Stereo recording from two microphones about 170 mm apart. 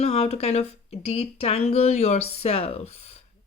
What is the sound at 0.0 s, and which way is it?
Speech, 40° left (ahead or behind).